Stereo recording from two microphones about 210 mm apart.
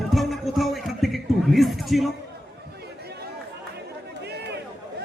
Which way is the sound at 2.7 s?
50° right (ahead or behind).